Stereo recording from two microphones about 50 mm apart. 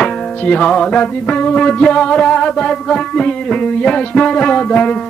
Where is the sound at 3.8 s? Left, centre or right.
Left.